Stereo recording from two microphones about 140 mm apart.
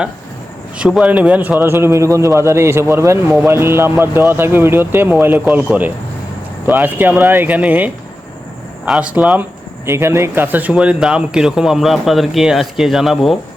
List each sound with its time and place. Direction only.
0.8 s a man's voice: 5° right (ahead or behind)
8.9 s speech: 10° right (ahead or behind)